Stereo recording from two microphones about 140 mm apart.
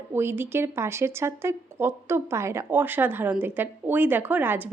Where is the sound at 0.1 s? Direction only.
15° right (ahead or behind).